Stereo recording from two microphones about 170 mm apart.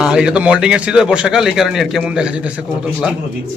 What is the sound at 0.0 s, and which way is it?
A man's voice, 5° right (ahead or behind).